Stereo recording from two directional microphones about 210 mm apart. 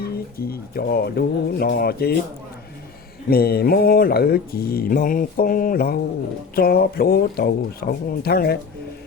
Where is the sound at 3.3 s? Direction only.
45° left (ahead or behind).